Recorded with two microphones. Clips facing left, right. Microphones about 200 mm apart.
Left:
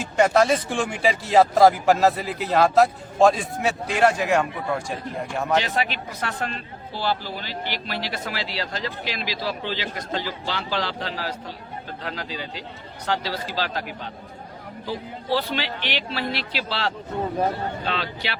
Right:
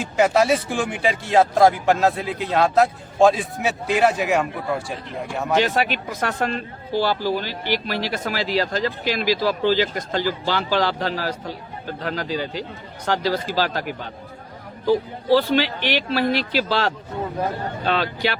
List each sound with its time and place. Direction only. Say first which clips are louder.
0.0 s speech: right 1 dB; centre (ahead or behind)
5.6 s speech: right 4 dB; 45° right (ahead or behind)
15.3 s speech: right 8 dB; 45° right (ahead or behind)